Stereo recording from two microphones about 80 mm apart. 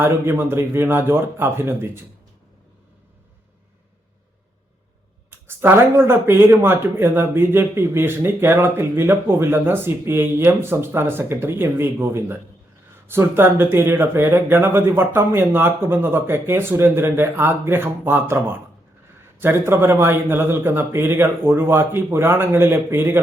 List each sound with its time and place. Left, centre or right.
0.0 s speech: right
5.3 s speech: right